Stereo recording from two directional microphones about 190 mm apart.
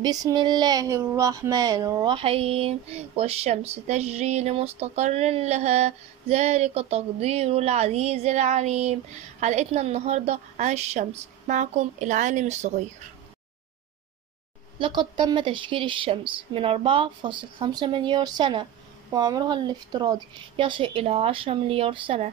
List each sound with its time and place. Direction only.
0.0 s speech: 20° right (ahead or behind); by 12.7 s 40° right (ahead or behind)
14.8 s speech: 25° right (ahead or behind)